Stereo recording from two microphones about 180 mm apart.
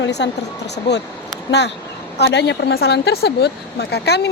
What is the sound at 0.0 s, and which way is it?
Speech, 70° left (ahead or behind).